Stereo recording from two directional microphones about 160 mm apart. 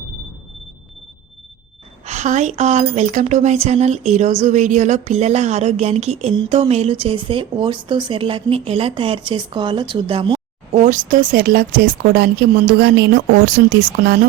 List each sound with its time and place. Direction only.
2.0 s a woman's voice: 45° right (ahead or behind); by 10.4 s 30° right (ahead or behind)
10.7 s speech: 50° right (ahead or behind); by 14.2 s 75° right (ahead or behind)